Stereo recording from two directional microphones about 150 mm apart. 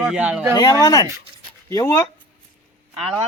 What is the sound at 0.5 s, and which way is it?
Speech, 25° left (ahead or behind).